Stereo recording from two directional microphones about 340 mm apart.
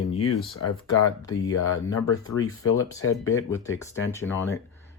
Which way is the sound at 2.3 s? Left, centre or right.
Left.